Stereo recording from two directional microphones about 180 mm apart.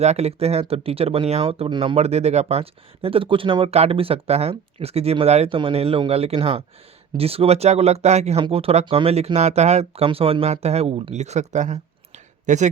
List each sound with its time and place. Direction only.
0.0 s speech: 35° right (ahead or behind)